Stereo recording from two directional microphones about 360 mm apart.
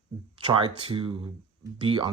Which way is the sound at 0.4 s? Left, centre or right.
Centre.